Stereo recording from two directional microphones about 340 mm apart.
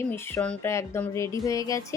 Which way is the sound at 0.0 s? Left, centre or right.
Centre.